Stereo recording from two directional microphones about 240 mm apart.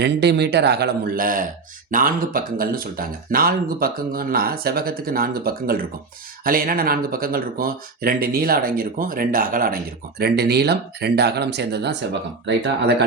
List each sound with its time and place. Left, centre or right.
0.0 s speech: right